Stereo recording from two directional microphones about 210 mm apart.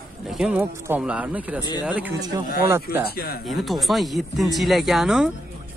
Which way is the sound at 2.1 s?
20° right (ahead or behind).